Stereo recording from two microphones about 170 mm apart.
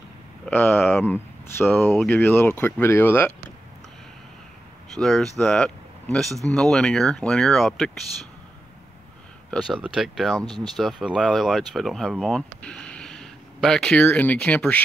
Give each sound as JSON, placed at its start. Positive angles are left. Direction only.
{"t": 0.5, "sound": "speech", "side_deg": 10}
{"t": 4.9, "sound": "speech", "side_deg": 0}
{"t": 9.5, "sound": "speech", "side_deg": -5}
{"t": 10.4, "sound": "speech", "side_deg": -25}
{"t": 10.8, "sound": "speech", "side_deg": 0}